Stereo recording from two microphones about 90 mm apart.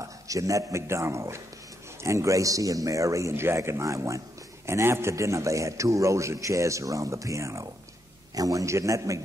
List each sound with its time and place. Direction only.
0.0 s a man's voice: 40° right (ahead or behind)